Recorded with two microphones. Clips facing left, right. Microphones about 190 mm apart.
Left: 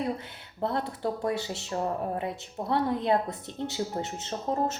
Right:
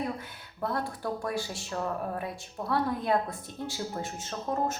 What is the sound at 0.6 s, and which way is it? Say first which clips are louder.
Speech: left 3 dB; 25° left (ahead or behind).